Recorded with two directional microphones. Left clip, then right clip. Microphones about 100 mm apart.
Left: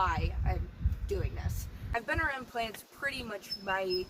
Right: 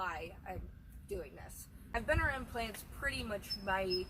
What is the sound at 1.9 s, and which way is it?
Speech, 30° left (ahead or behind).